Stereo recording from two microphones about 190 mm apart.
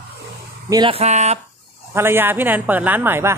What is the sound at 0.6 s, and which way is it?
Speech, 25° right (ahead or behind).